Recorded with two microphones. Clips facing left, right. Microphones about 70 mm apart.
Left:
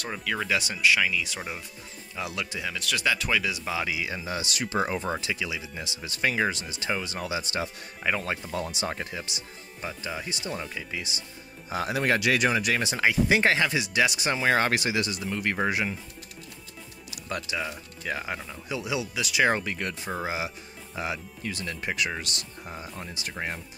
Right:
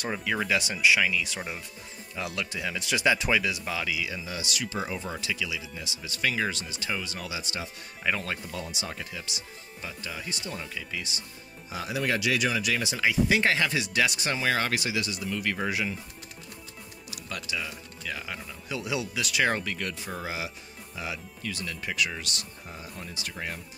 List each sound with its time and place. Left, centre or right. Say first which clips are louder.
0.0 s speech: right 1 dB; centre
2.7 s speech: right 3 dB; centre
3.4 s speech: even; centre
3.7 s speech: left 2 dB; left
5.3 s speech: left 1 dB; left
6.3 s speech: left 3 dB; centre; by 7.7 s left
8.0 s speech: left 1 dB; centre
8.3 s speech: left 4 dB; left
11.7 s speech: left 4 dB; left
13.3 s speech: left 3 dB; left
13.6 s speech: left 2 dB; centre
14.4 s speech: left 4 dB; left
17.3 s speech: left 3 dB; left
18.7 s speech: left 1 dB; centre; by 23.6 s left